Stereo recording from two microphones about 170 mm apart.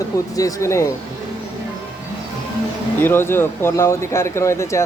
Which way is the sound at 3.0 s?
15° left (ahead or behind).